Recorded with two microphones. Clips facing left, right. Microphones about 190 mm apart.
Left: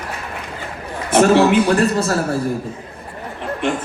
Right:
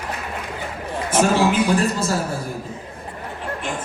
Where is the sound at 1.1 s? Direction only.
65° left (ahead or behind).